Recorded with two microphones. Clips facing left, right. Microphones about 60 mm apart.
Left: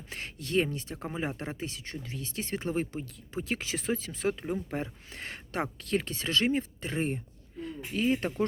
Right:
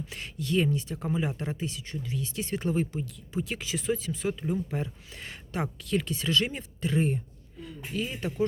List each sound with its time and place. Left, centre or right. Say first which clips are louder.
0.1 s speech: even; left